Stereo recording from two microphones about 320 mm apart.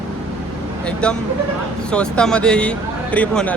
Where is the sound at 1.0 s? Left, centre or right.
Centre.